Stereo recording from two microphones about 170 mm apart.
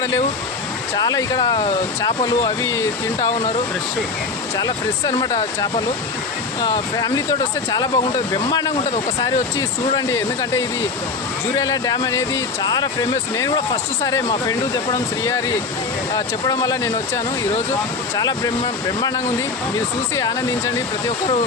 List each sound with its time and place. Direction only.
0.9 s speech: 20° left (ahead or behind)
3.2 s speech: 30° left (ahead or behind)
4.5 s speech: 25° left (ahead or behind)
6.7 s speech: 25° left (ahead or behind)
9.2 s speech: 20° left (ahead or behind)
11.6 s speech: 25° left (ahead or behind)
18.2 s speech: 25° left (ahead or behind)